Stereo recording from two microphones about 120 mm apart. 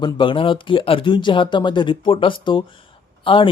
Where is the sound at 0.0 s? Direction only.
45° left (ahead or behind).